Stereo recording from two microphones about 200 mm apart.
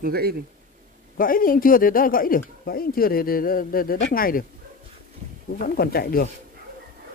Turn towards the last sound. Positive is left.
turn(degrees=50)  # may be behind; listen again after turning